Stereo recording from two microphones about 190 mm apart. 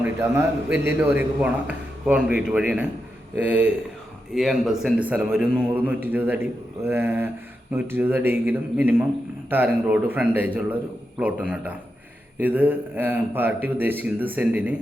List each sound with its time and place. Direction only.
0.0 s a man's voice: 10° right (ahead or behind)